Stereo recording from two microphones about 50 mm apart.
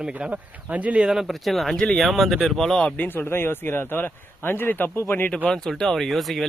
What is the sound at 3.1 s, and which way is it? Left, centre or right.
Speech, left.